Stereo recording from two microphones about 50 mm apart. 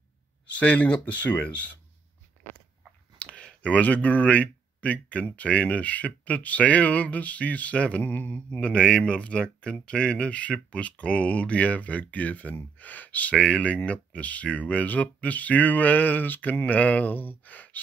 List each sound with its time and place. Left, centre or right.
0.6 s speech: left
3.2 s a sound: left
5.3 s speech: left
8.0 s speech: left